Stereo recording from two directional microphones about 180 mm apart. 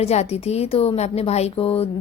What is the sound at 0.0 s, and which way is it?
A woman's voice, 35° left (ahead or behind).